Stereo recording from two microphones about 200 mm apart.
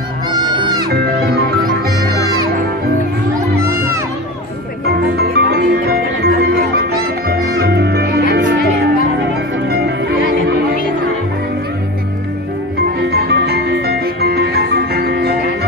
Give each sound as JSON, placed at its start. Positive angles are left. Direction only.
{"t": 0.8, "sound": "music", "side_deg": -55}
{"t": 3.6, "sound": "music", "side_deg": -15}
{"t": 5.1, "sound": "music", "side_deg": -55}
{"t": 9.7, "sound": "music", "side_deg": -55}
{"t": 13.1, "sound": "music", "side_deg": -55}